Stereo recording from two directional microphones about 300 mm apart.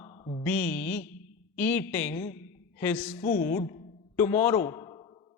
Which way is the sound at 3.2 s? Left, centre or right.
Left.